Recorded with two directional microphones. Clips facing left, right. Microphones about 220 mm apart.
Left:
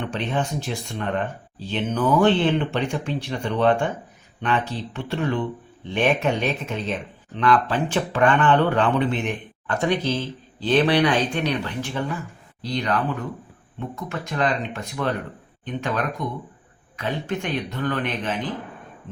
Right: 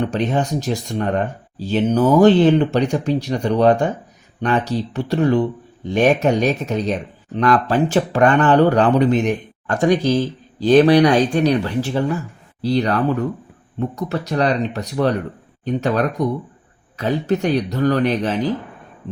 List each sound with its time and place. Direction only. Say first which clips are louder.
0.0 s speech: right 6 dB; 40° right (ahead or behind)